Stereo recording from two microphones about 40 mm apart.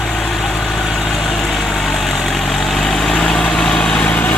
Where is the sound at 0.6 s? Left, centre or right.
Centre.